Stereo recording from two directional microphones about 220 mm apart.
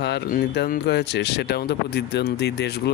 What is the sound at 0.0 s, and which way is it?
Speech, 50° left (ahead or behind).